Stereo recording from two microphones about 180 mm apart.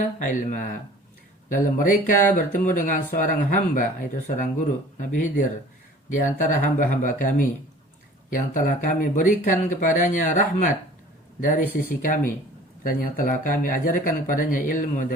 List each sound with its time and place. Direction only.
0.0 s speech: 45° left (ahead or behind)